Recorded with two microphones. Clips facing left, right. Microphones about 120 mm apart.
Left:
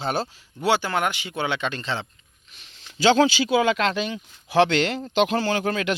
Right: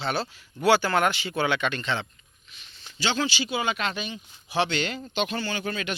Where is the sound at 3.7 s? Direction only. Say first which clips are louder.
Left 7 dB; 90° left.